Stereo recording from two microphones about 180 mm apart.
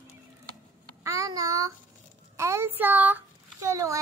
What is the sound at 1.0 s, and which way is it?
A child's voice, 15° right (ahead or behind).